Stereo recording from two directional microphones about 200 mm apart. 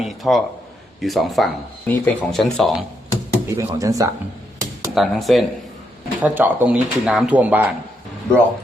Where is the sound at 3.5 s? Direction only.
15° right (ahead or behind).